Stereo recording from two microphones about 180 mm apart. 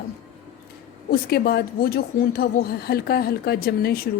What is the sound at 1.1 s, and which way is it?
A woman's voice, 60° left (ahead or behind).